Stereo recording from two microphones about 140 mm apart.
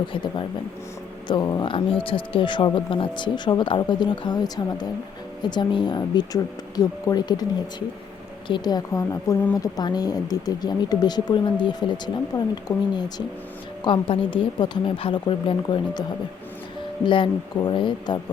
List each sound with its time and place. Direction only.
0.1 s speech: 35° left (ahead or behind)
8.4 s a woman's voice: 30° left (ahead or behind)